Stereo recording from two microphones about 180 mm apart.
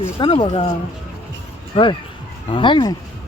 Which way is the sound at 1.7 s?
30° left (ahead or behind).